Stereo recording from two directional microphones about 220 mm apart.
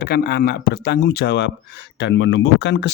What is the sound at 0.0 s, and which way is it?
Speech, 45° left (ahead or behind).